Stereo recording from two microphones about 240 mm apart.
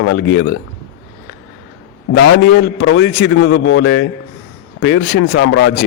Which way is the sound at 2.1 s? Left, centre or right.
Left.